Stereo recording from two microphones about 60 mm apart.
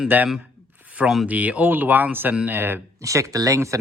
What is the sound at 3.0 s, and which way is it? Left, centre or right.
Speech, right.